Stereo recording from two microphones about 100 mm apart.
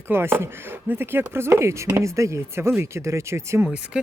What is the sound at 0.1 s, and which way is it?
Speech, 25° right (ahead or behind).